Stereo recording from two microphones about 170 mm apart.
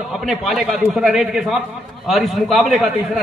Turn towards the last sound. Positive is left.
turn(degrees=0)  # may be behind; listen again after turning